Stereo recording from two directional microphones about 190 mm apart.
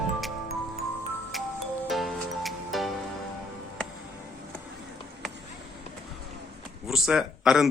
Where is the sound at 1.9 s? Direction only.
Centre (ahead or behind).